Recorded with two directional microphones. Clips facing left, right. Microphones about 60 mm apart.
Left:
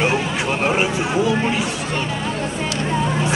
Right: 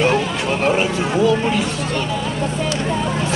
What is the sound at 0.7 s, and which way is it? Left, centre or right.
Speech, centre.